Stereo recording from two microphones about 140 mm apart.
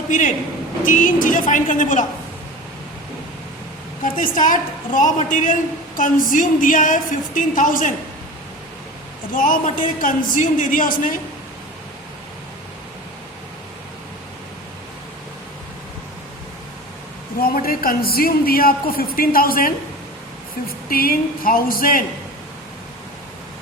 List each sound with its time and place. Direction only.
0.1 s a woman's voice: 65° left (ahead or behind)
4.1 s a woman's voice: 70° left (ahead or behind)
9.3 s a woman's voice: 70° left (ahead or behind)
17.4 s a woman's voice: 90° left
20.9 s a woman's voice: 90° left